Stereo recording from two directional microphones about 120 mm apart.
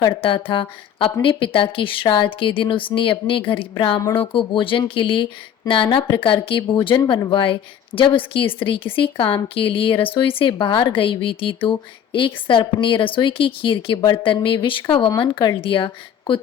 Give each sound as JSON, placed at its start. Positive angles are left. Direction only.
{"t": 0.1, "sound": "speech", "side_deg": 45}
{"t": 4.0, "sound": "speech", "side_deg": 20}
{"t": 4.3, "sound": "speech", "side_deg": 45}